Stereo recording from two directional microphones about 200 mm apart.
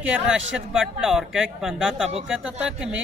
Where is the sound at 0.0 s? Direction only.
5° right (ahead or behind).